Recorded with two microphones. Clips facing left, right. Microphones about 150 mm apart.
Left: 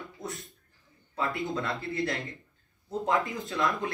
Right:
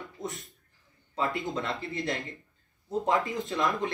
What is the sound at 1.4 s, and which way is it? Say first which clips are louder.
Speech: left 1 dB; 20° right (ahead or behind).